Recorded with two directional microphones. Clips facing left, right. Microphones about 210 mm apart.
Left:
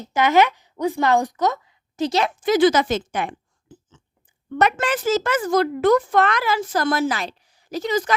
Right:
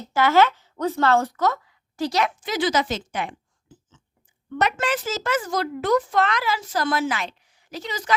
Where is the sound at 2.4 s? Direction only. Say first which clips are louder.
Left 7 dB; 50° left (ahead or behind).